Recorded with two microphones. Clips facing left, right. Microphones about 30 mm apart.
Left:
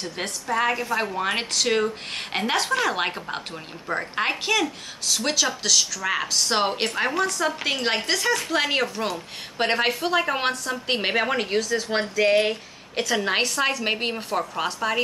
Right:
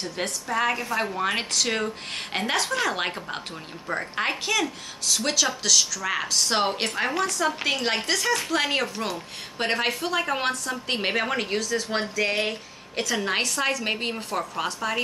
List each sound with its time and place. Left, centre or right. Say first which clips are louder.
0.0 s a woman's voice: even; centre
9.6 s a woman's voice: left 3 dB; centre